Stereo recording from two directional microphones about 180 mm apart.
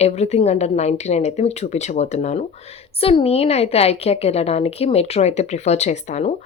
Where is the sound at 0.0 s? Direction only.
35° left (ahead or behind).